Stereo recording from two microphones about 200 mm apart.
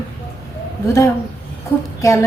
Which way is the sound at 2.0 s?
15° left (ahead or behind).